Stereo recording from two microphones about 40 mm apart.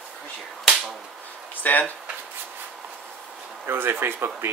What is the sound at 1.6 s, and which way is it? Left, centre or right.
Speech, left.